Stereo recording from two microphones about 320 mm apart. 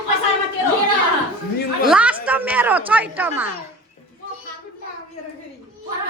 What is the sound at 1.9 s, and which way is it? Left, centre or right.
Speech, centre.